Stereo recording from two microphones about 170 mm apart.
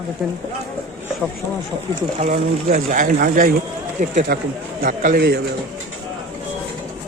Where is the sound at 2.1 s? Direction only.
40° right (ahead or behind).